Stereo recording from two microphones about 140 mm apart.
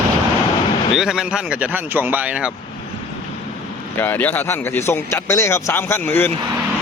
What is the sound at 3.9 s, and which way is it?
A man's voice, 15° left (ahead or behind).